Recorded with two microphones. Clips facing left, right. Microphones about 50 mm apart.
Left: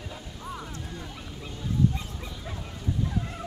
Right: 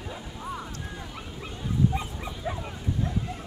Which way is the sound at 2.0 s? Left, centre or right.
Right.